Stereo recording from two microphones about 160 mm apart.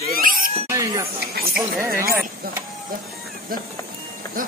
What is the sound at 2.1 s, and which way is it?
Speech, 15° right (ahead or behind).